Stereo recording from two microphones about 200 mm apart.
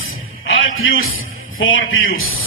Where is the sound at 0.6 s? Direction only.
80° left.